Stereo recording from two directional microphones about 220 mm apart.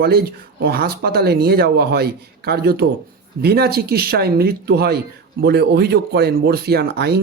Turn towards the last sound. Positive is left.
turn(degrees=-50)  # may be behind; listen again after turning